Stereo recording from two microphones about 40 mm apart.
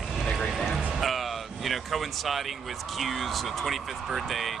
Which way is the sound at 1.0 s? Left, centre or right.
Centre.